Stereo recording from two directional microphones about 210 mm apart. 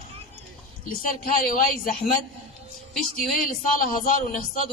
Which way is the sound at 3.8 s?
40° left (ahead or behind).